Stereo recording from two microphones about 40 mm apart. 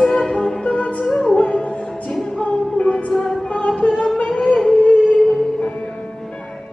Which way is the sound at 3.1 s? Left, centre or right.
Centre.